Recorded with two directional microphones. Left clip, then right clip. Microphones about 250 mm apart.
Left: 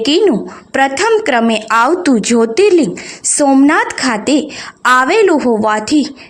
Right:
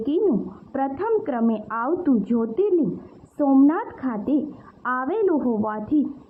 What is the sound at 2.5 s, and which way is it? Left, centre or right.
Speech, left.